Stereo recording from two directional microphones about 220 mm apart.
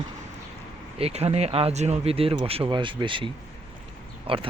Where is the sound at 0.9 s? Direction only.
30° right (ahead or behind).